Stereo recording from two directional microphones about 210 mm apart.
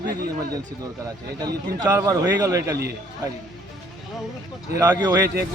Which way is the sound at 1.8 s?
15° right (ahead or behind).